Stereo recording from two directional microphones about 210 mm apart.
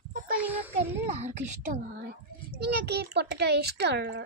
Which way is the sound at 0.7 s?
30° right (ahead or behind).